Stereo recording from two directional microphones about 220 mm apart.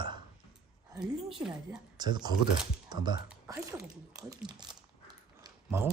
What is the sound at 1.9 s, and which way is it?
Speech, 20° right (ahead or behind).